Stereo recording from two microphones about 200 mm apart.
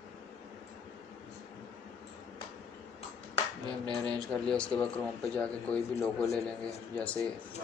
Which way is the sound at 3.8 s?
20° right (ahead or behind).